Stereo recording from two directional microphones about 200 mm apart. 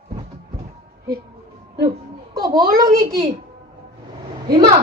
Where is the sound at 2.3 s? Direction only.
20° right (ahead or behind).